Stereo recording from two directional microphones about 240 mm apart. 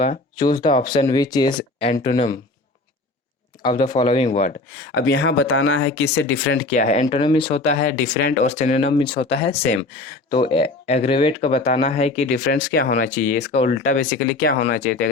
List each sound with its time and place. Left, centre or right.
0.0 s speech: left
1.9 s speech: left
3.6 s speech: centre
4.9 s speech: left
6.7 s speech: left
8.0 s speech: left
8.4 s speech: left
9.1 s speech: left
9.4 s speech: left
12.5 s speech: left